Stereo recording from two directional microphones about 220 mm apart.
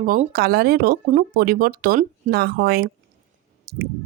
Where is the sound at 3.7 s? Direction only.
45° right (ahead or behind).